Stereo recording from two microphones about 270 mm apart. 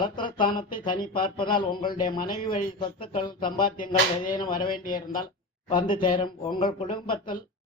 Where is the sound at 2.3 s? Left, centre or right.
Left.